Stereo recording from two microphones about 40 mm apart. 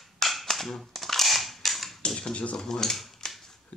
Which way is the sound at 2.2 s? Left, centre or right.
Left.